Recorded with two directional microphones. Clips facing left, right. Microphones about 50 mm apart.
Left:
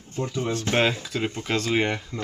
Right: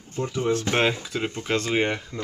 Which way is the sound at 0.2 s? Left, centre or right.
Right.